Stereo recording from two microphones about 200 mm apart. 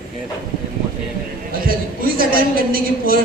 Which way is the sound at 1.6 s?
45° right (ahead or behind).